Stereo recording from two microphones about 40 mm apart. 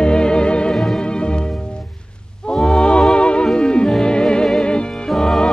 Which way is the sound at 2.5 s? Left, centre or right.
Centre.